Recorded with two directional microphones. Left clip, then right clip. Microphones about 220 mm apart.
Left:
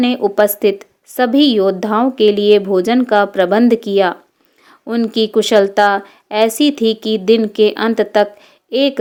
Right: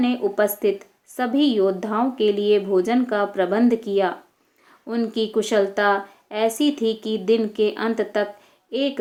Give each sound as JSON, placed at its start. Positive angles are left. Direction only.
{"t": 0.0, "sound": "a woman's voice", "side_deg": 40}